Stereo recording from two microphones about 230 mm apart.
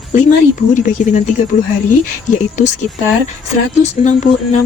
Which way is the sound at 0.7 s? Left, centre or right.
Left.